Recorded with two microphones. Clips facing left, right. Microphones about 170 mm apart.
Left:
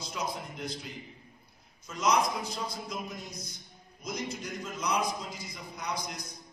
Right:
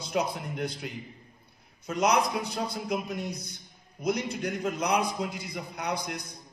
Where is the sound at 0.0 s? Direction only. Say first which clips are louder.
Right 6 dB; 60° right (ahead or behind).